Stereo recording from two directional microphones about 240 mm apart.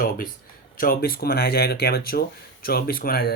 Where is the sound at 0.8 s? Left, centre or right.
Left.